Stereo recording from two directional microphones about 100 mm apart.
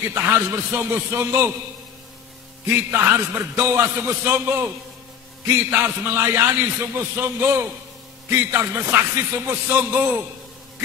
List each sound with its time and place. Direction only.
0.1 s a man's voice: 25° right (ahead or behind)
2.7 s a man's voice: 25° right (ahead or behind)
5.7 s a man's voice: 25° right (ahead or behind)